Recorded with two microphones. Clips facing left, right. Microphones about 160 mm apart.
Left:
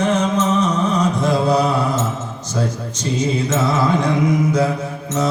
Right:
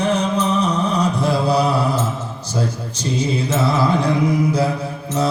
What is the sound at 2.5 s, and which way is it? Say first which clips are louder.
Mantra: left 1 dB; 30° right (ahead or behind).